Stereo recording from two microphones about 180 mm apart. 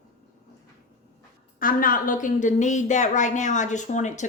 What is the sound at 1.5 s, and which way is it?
A woman's voice, 50° left (ahead or behind).